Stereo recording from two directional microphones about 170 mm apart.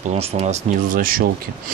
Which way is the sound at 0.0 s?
40° right (ahead or behind).